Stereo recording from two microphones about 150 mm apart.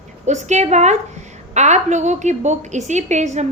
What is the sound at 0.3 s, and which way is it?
A woman's voice, 50° right (ahead or behind).